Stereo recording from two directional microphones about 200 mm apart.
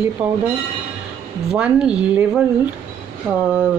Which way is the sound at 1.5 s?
5° right (ahead or behind).